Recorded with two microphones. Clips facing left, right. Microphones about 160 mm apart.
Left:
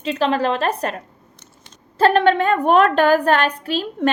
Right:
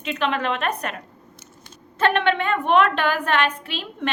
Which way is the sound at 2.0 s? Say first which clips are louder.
Left 6 dB; 35° left (ahead or behind).